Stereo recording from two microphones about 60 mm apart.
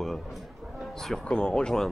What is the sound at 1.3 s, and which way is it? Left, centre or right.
Speech, centre.